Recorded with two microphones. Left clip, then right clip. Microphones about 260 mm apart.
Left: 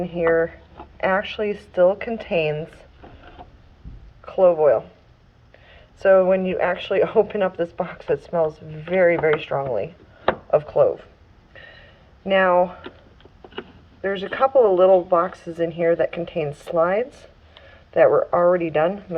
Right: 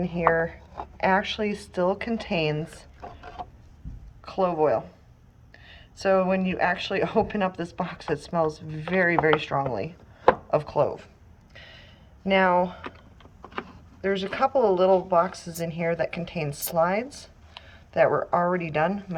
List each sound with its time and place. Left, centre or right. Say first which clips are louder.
0.0 s speech: left 4 dB; centre
4.3 s speech: left 7 dB; centre
5.6 s a sound: left 7 dB; centre
6.5 s speech: left 4 dB; centre
12.2 s speech: left 4 dB; centre
14.0 s speech: left 4 dB; centre